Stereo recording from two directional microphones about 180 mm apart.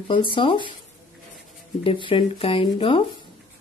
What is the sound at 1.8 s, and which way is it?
Speech, 30° left (ahead or behind).